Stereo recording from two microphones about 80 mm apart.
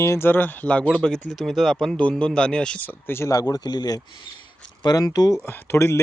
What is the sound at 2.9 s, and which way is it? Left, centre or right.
Speech, left.